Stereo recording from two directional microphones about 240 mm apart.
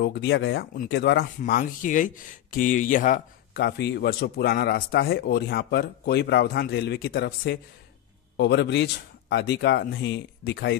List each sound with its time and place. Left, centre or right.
0.0 s speech: left
1.4 s speech: left